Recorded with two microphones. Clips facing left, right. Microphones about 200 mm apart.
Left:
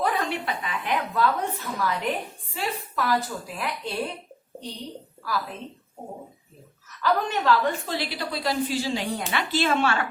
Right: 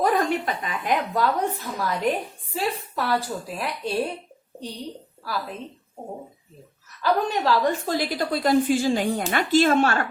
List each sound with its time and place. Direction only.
0.0 s a woman's voice: 45° right (ahead or behind)
7.0 s a woman's voice: 40° right (ahead or behind)